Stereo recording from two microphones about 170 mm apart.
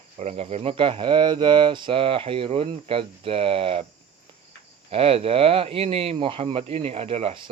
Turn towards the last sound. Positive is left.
turn(degrees=-35)  # may be behind; listen again after turning